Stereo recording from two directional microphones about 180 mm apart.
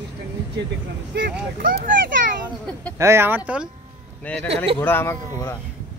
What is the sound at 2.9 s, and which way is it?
Speech, 15° right (ahead or behind).